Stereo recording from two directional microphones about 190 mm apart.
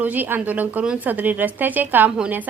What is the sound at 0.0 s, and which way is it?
A woman's voice, 10° right (ahead or behind).